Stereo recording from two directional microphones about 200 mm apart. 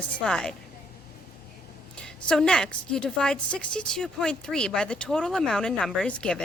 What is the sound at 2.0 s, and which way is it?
A woman's voice, 5° left (ahead or behind).